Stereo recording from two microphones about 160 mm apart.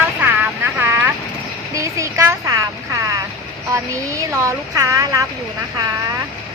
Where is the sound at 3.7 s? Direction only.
20° right (ahead or behind).